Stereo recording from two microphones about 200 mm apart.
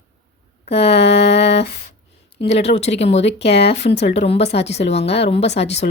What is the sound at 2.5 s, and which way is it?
Speech, 30° left (ahead or behind).